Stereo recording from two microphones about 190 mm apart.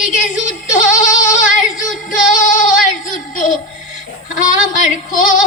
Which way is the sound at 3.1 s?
45° left (ahead or behind).